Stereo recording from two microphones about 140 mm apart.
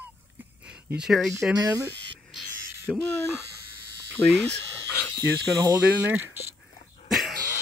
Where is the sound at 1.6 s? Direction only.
25° right (ahead or behind).